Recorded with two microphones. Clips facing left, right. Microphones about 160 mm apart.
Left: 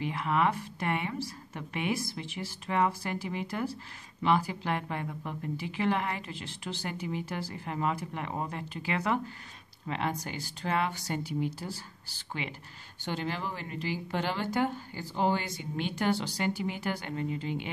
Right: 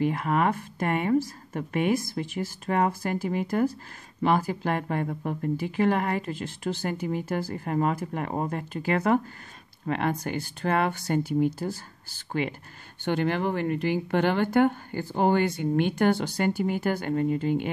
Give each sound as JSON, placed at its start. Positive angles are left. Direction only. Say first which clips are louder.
{"t": 0.0, "sound": "speech", "louder": "right 4 dB", "side_deg": -45}
{"t": 13.0, "sound": "speech", "louder": "right 9 dB", "side_deg": -60}